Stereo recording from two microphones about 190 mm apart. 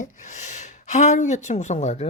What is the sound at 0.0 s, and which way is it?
Speech, 40° left (ahead or behind).